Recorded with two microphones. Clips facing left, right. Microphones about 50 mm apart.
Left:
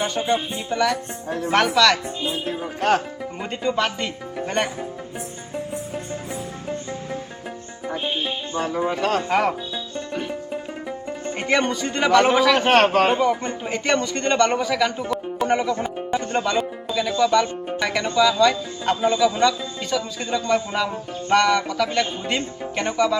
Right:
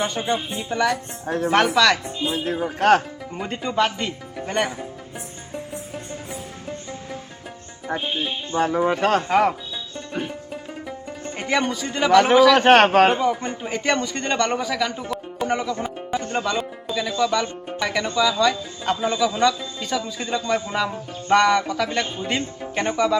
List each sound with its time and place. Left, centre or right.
0.0 s speech: right; by 2.0 s centre
2.3 s music: right
3.7 s speech: centre
8.5 s a man's voice: right
10.5 s music: centre
12.5 s a man's voice: right
13.4 s a man's voice: centre
22.7 s speech: centre